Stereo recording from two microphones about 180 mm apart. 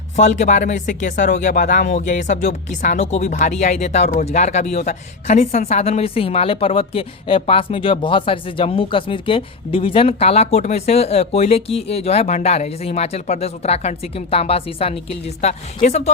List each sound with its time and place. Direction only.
0.2 s a woman's voice: 40° left (ahead or behind)